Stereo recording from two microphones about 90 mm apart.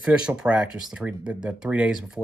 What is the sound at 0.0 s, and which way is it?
Speech, 10° right (ahead or behind).